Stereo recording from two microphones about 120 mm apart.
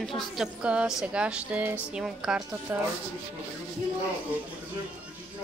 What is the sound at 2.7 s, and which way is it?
Speech, 25° right (ahead or behind).